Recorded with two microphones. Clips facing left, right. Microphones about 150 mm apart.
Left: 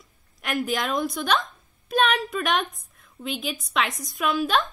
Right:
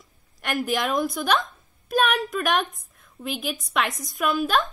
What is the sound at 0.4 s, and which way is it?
A woman's voice, centre (ahead or behind).